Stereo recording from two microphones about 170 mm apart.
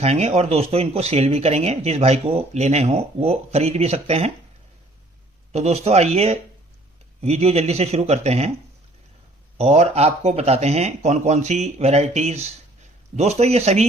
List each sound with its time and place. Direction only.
0.0 s speech: 40° right (ahead or behind)
5.5 s speech: 40° right (ahead or behind)
9.6 s speech: 40° right (ahead or behind)